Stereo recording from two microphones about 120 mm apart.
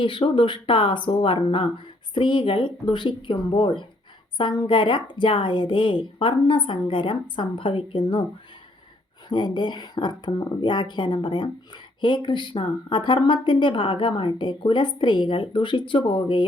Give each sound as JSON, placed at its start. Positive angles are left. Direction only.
{"t": 0.0, "sound": "a woman's voice", "side_deg": 45}
{"t": 9.3, "sound": "speech", "side_deg": 40}